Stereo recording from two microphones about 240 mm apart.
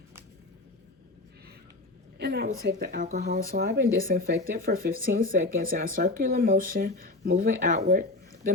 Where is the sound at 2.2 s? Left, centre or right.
Right.